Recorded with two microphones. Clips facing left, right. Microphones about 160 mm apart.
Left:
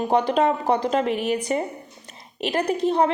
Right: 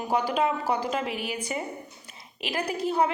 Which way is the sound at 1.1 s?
5° right (ahead or behind).